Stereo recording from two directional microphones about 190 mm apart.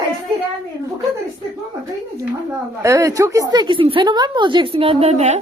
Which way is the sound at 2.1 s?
15° right (ahead or behind).